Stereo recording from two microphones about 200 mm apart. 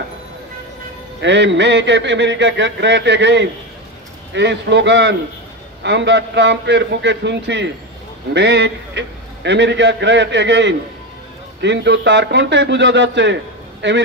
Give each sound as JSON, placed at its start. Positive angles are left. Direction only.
{"t": 1.2, "sound": "a man's voice", "side_deg": -60}